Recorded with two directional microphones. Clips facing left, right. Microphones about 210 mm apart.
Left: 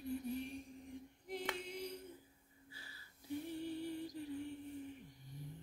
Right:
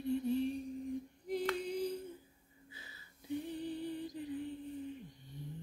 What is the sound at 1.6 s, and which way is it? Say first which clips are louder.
Singing: right 9 dB; 35° right (ahead or behind).